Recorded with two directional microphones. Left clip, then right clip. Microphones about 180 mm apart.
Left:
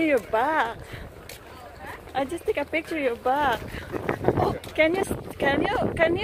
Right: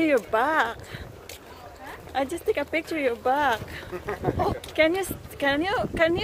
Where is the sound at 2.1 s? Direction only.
Centre (ahead or behind).